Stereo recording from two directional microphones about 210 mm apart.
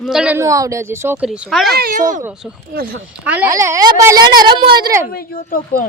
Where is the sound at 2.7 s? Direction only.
45° right (ahead or behind).